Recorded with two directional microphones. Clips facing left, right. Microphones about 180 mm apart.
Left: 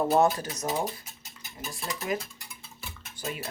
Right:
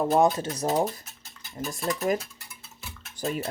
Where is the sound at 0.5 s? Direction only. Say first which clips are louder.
Right 5 dB; 30° right (ahead or behind).